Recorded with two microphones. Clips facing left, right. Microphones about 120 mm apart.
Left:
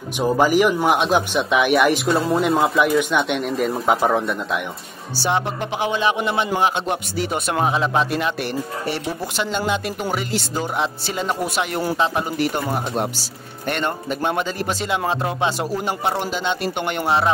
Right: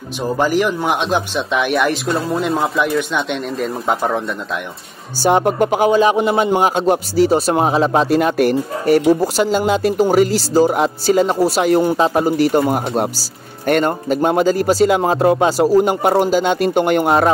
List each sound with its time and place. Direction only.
0.2 s speech: 10° left (ahead or behind)
5.2 s speech: 45° right (ahead or behind)
13.7 s speech: 40° right (ahead or behind)